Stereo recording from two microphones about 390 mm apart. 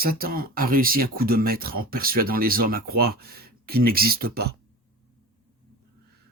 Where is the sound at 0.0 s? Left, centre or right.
Right.